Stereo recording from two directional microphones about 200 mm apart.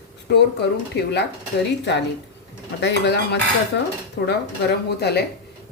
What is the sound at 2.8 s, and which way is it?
A woman's voice, 60° left (ahead or behind).